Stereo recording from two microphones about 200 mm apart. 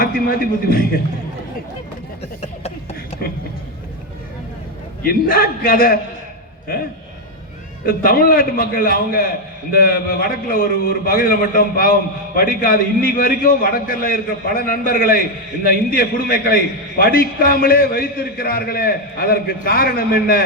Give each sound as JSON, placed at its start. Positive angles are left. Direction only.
{"t": 0.0, "sound": "a man's voice", "side_deg": 45}
{"t": 5.0, "sound": "a man's voice", "side_deg": 45}
{"t": 7.9, "sound": "a man's voice", "side_deg": 45}